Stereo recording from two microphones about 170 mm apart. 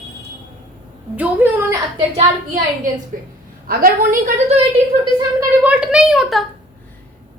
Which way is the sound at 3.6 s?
60° right (ahead or behind).